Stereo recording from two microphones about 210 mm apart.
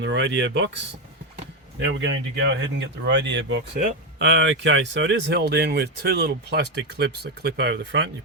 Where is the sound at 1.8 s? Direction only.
60° right (ahead or behind).